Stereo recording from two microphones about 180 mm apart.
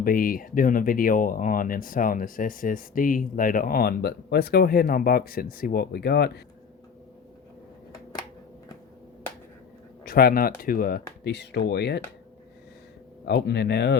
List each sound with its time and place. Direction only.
0.0 s speech: 50° left (ahead or behind)
10.0 s speech: 55° left (ahead or behind)
13.2 s speech: 70° left (ahead or behind)